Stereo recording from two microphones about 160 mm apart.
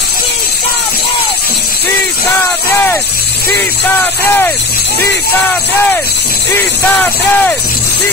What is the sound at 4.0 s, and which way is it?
Speech, 10° left (ahead or behind).